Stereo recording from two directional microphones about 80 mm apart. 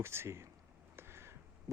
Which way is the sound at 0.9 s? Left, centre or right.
Right.